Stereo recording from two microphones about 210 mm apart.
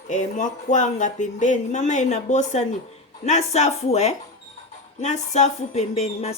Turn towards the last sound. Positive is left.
turn(degrees=30)  # may be behind; listen again after turning